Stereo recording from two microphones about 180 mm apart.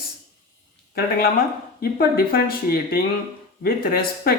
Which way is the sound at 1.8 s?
55° left (ahead or behind).